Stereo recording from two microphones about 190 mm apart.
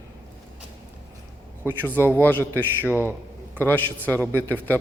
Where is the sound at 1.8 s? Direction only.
10° left (ahead or behind).